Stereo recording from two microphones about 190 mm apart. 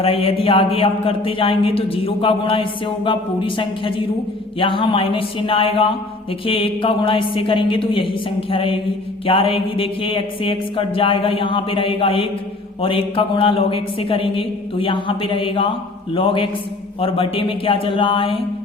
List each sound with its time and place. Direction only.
0.0 s speech: 30° left (ahead or behind)